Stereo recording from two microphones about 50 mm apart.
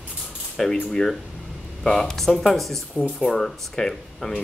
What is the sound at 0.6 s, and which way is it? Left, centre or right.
Speech, centre.